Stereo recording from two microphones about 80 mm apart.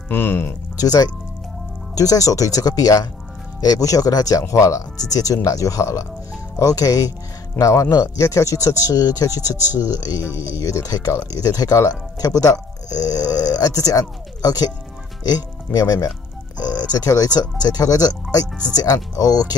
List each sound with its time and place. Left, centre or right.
0.1 s speech: left
0.7 s speech: left